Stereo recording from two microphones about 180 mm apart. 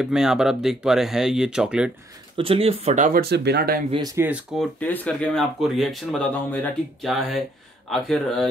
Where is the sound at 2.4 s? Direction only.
30° right (ahead or behind).